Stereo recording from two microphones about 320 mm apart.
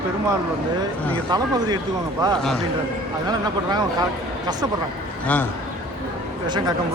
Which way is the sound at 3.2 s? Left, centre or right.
Centre.